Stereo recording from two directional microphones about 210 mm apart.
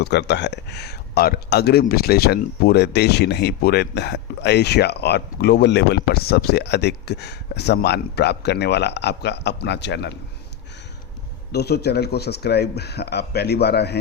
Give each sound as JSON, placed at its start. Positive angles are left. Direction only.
{"t": 0.0, "sound": "speech", "side_deg": 55}
{"t": 11.5, "sound": "speech", "side_deg": 50}